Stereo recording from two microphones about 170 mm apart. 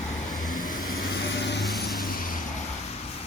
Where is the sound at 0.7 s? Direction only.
55° left (ahead or behind); by 1.6 s 90° left.